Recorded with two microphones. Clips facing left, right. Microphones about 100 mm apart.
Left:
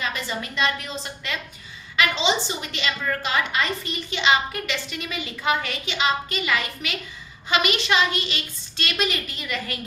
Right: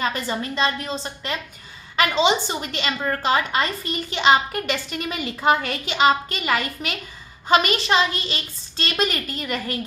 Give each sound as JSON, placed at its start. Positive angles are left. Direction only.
{"t": 0.0, "sound": "a woman's voice", "side_deg": -40}
{"t": 2.0, "sound": "a woman's voice", "side_deg": -45}